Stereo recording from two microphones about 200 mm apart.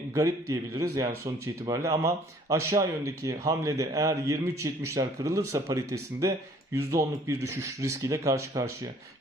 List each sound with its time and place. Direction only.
0.1 s a man's voice: 15° right (ahead or behind)